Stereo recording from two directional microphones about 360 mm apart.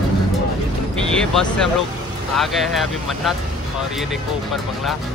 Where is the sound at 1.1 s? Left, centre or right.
Centre.